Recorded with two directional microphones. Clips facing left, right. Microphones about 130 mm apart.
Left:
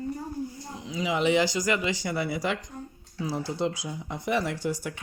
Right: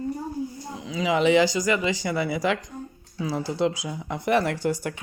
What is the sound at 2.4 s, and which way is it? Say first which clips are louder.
Speech: right 5 dB; 90° right.